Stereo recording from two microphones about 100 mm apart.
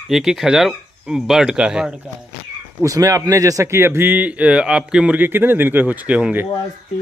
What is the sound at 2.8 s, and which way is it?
A man's voice, 35° right (ahead or behind).